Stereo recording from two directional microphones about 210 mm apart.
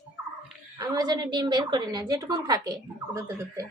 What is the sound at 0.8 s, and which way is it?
A woman's voice, 20° right (ahead or behind).